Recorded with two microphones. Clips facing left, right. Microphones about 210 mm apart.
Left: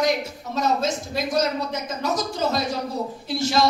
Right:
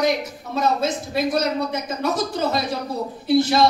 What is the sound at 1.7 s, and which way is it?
Speech, 55° right (ahead or behind).